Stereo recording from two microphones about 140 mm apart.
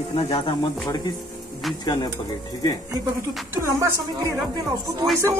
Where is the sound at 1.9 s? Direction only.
30° left (ahead or behind).